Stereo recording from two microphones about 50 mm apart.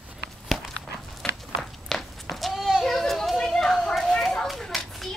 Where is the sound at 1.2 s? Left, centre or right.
Centre.